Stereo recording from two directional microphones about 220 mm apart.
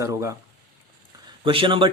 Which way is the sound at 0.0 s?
15° right (ahead or behind).